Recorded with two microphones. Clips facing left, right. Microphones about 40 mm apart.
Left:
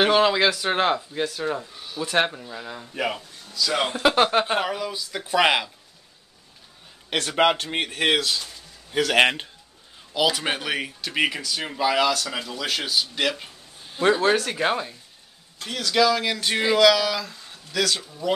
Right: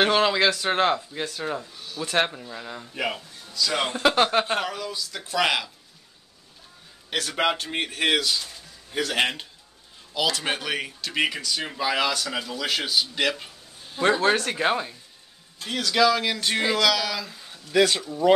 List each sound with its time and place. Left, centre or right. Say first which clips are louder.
0.0 s speech: left 2 dB; centre
7.1 s a man's voice: left 4 dB; left
9.0 s a man's voice: left 6 dB; left
10.1 s speech: left 2 dB; centre
17.2 s speech: left 1 dB; centre
17.7 s speech: right 5 dB; right